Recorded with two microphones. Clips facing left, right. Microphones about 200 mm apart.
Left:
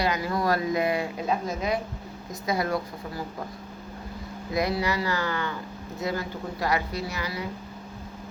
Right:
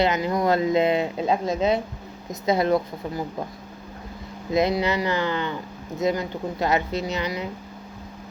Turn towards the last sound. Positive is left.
turn(degrees=-20)  # may be behind; listen again after turning